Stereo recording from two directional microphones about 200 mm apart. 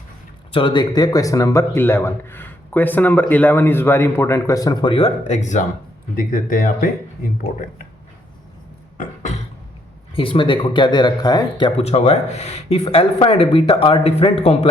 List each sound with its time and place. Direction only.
0.5 s a man's voice: 25° left (ahead or behind); by 7.3 s 45° left (ahead or behind)
9.0 s cough: 35° left (ahead or behind)
10.2 s speech: 25° left (ahead or behind)